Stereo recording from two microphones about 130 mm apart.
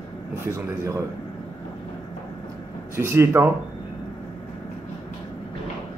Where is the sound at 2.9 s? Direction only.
20° right (ahead or behind).